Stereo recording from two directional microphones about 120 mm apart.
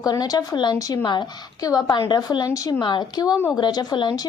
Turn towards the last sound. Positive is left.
turn(degrees=35)  # may be behind; listen again after turning